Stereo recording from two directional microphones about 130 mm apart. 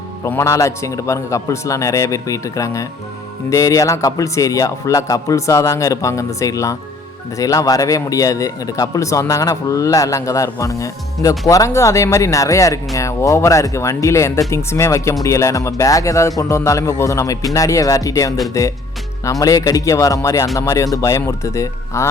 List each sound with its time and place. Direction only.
0.3 s speech: 20° left (ahead or behind)